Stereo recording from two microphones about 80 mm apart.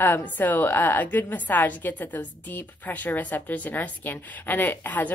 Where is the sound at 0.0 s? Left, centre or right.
Left.